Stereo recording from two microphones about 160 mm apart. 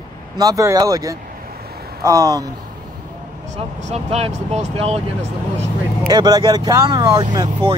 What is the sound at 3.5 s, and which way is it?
Speech, 45° right (ahead or behind).